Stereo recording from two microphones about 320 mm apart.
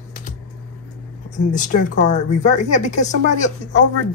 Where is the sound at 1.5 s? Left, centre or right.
Left.